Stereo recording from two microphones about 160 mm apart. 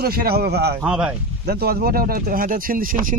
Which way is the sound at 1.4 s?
75° right (ahead or behind).